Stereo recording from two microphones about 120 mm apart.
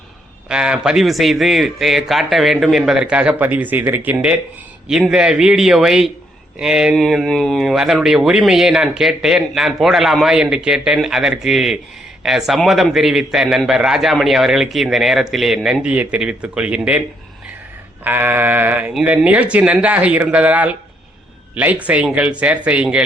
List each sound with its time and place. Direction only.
0.4 s speech: 5° right (ahead or behind)
18.0 s speech: 15° right (ahead or behind)